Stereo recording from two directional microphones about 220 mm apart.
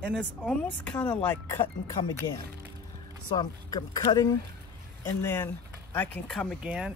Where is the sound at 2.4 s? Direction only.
45° right (ahead or behind).